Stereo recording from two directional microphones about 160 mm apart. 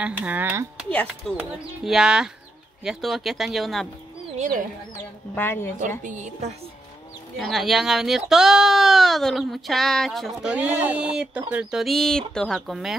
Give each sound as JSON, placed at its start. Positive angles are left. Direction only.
{"t": 0.0, "sound": "speech", "side_deg": -10}
{"t": 0.8, "sound": "speech", "side_deg": 10}
{"t": 1.9, "sound": "speech", "side_deg": -5}
{"t": 5.3, "sound": "speech", "side_deg": 15}
{"t": 5.8, "sound": "a woman's voice", "side_deg": -50}
{"t": 7.3, "sound": "speech", "side_deg": 0}